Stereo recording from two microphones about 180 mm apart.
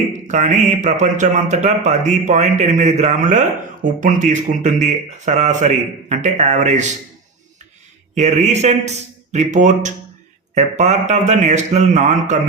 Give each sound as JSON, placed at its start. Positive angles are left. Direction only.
{"t": 0.3, "sound": "speech", "side_deg": -40}
{"t": 8.1, "sound": "speech", "side_deg": -40}